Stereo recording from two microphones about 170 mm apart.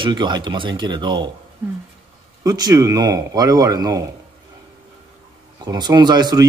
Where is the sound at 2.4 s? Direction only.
20° right (ahead or behind).